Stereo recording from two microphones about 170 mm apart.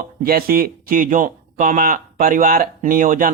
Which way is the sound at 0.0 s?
60° right (ahead or behind).